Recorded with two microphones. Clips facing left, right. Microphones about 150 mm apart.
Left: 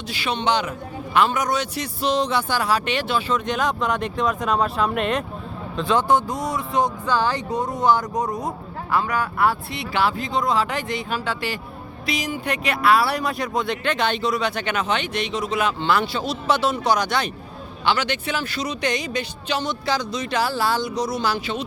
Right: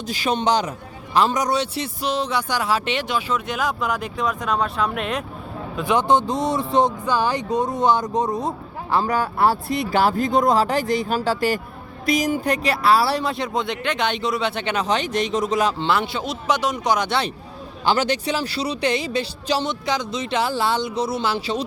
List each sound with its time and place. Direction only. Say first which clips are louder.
0.1 s speech: right 2 dB; 40° right (ahead or behind)
2.0 s speech: left 3 dB; 10° right (ahead or behind)
5.7 s speech: right 1 dB; 15° right (ahead or behind)
7.0 s speech: right 1 dB; 15° right (ahead or behind); by 15.9 s 35° right (ahead or behind)
15.9 s speech: left 1 dB; 20° right (ahead or behind)
17.8 s speech: right 3 dB; 40° right (ahead or behind)
19.8 s speech: even; 20° right (ahead or behind)